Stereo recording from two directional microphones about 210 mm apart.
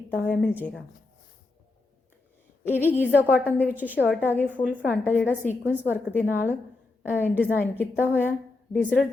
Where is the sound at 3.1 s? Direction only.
5° right (ahead or behind).